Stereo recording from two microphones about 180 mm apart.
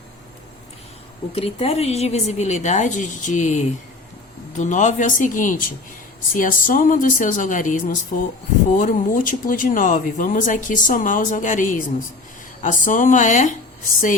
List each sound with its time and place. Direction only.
1.3 s a woman's voice: 35° left (ahead or behind)